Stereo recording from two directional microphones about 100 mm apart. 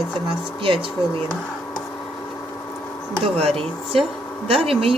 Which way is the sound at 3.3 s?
70° right (ahead or behind).